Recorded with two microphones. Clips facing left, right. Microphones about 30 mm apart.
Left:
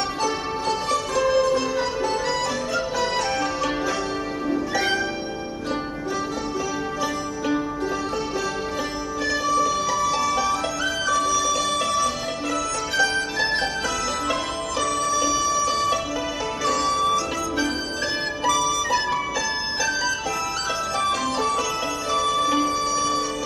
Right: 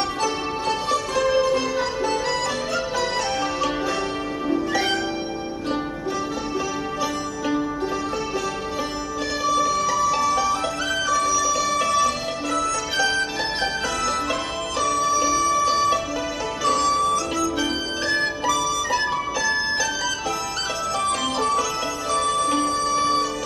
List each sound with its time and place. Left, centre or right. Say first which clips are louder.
0.2 s music: even; centre
4.5 s music: right 1 dB; centre
9.5 s music: right 2 dB; centre
11.8 s music: right 2 dB; centre
15.0 s music: right 2 dB; centre
18.4 s music: left 1 dB; centre
21.1 s music: right 1 dB; centre
22.8 s music: right 2 dB; right